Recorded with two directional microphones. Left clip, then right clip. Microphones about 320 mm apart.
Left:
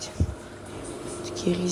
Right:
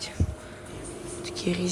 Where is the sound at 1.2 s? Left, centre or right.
Centre.